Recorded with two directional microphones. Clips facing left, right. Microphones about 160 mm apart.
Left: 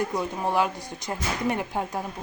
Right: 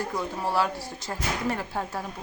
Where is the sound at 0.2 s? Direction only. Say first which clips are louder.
Right 1 dB; 15° left (ahead or behind).